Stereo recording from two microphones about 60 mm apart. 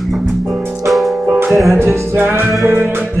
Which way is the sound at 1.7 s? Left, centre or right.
Right.